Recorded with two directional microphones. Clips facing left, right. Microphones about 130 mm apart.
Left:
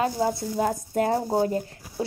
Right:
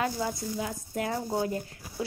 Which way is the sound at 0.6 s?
45° left (ahead or behind).